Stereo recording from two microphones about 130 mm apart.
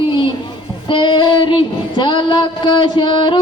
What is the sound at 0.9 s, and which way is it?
Child singing, 40° left (ahead or behind).